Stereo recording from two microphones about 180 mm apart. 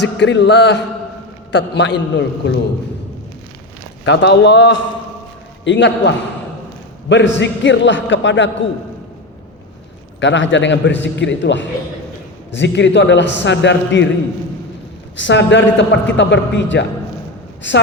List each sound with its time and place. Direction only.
0.0 s mantra: 80° left
4.0 s a man's voice: 85° left
10.2 s a man's voice: 90° left
12.5 s a man's voice: 75° left (ahead or behind)
15.2 s a man's voice: 85° left
17.6 s a man's voice: 90° left